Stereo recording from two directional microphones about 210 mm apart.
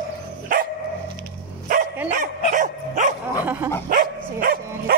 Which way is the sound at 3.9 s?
40° right (ahead or behind).